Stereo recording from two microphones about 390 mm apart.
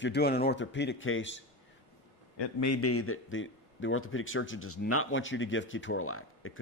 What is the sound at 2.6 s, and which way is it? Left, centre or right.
A man's voice, left.